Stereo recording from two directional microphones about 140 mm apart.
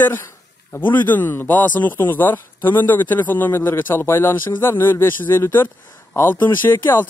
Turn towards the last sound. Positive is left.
turn(degrees=15)  # may be behind; listen again after turning